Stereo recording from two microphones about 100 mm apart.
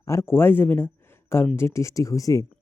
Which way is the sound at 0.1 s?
25° left (ahead or behind).